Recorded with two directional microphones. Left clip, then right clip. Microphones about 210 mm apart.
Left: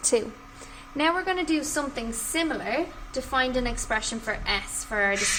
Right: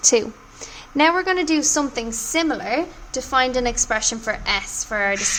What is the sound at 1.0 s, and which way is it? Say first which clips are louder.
A woman's voice: right 7 dB; 40° right (ahead or behind).